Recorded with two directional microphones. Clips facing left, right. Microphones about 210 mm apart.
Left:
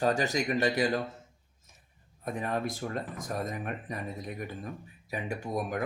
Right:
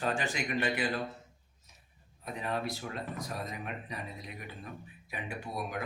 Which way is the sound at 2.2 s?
50° left (ahead or behind).